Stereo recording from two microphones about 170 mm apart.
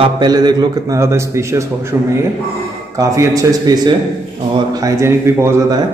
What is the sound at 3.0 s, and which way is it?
A man's voice, 20° right (ahead or behind).